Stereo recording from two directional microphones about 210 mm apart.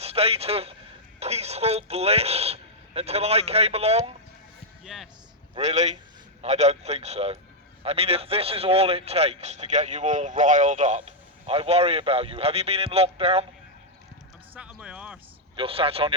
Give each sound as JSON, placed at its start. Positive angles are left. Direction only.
{"t": 0.0, "sound": "a man's voice", "side_deg": -30}
{"t": 4.9, "sound": "speech", "side_deg": 0}
{"t": 5.5, "sound": "a man's voice", "side_deg": -30}
{"t": 14.5, "sound": "a sound", "side_deg": -5}
{"t": 15.5, "sound": "a man's voice", "side_deg": -25}